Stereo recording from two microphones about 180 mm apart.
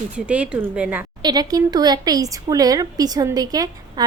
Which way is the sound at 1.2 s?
25° right (ahead or behind).